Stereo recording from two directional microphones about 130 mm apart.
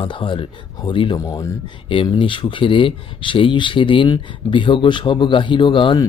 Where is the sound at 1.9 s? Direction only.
40° left (ahead or behind).